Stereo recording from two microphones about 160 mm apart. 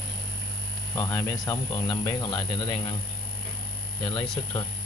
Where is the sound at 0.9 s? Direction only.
20° left (ahead or behind).